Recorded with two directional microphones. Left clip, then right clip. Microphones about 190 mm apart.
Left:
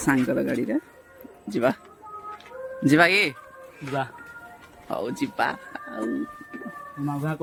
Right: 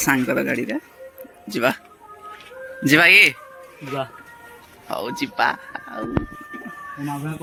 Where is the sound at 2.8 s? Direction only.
10° left (ahead or behind).